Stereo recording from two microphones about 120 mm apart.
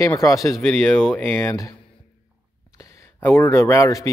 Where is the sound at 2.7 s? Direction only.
25° left (ahead or behind).